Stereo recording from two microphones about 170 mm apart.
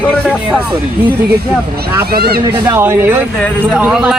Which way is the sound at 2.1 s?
65° right (ahead or behind).